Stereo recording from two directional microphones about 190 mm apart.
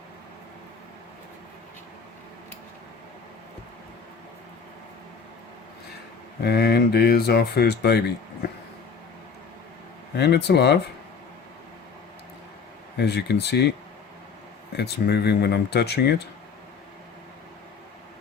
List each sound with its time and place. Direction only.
6.4 s speech: 55° left (ahead or behind)
10.2 s speech: 60° left (ahead or behind)
13.0 s speech: 60° left (ahead or behind)
14.8 s speech: 60° left (ahead or behind)